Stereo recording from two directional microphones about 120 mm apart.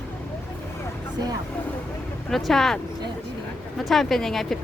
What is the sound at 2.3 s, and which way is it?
Speech, centre (ahead or behind).